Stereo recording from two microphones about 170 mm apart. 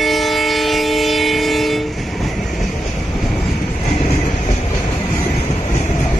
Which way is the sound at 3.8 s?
40° left (ahead or behind).